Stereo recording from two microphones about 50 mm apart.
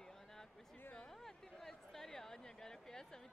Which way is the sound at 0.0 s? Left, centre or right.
Centre.